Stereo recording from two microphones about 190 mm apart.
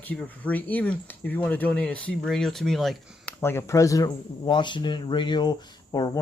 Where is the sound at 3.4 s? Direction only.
15° left (ahead or behind).